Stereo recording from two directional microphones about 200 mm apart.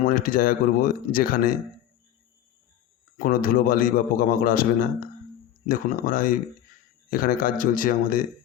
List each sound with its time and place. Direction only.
0.0 s a man's voice: 45° left (ahead or behind)
3.2 s a man's voice: 45° left (ahead or behind)